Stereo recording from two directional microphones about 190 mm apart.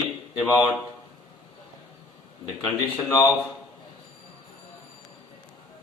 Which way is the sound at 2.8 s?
20° left (ahead or behind).